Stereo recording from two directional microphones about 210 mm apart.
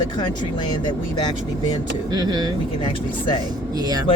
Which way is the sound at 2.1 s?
20° right (ahead or behind).